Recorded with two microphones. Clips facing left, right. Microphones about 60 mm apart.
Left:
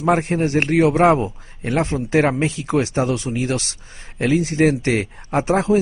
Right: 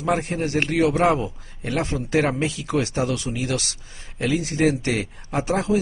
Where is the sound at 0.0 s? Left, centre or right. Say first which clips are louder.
Left 5 dB; left.